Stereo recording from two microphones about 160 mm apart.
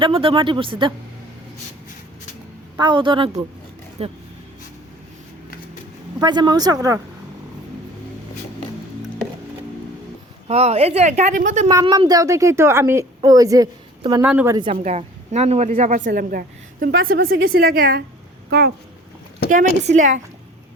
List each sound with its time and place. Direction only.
0.0 s speech: 35° right (ahead or behind)
2.7 s speech: 30° right (ahead or behind)
6.1 s speech: 25° right (ahead or behind)
10.5 s speech: 40° right (ahead or behind)
11.7 s speech: 20° right (ahead or behind)
14.2 s speech: 10° right (ahead or behind)
14.7 s speech: 40° right (ahead or behind)
16.0 s a woman's voice: 65° right (ahead or behind)
19.5 s speech: 55° right (ahead or behind)